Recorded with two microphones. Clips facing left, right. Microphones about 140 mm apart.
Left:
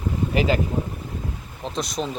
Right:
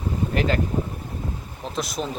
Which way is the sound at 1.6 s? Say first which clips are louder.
Left 1 dB; centre (ahead or behind).